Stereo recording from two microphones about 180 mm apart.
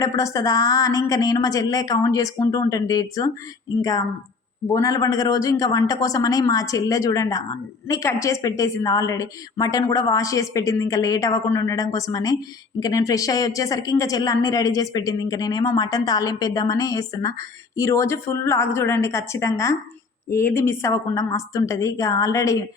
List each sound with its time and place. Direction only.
0.0 s a woman's voice: 15° left (ahead or behind)